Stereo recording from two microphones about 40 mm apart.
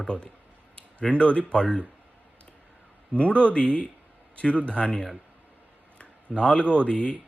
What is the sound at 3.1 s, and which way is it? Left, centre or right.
Speech, left.